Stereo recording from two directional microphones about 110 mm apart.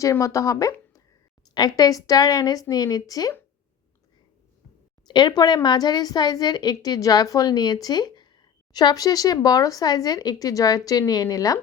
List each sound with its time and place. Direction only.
0.0 s a woman's voice: 30° left (ahead or behind)
5.0 s a woman's voice: 40° left (ahead or behind)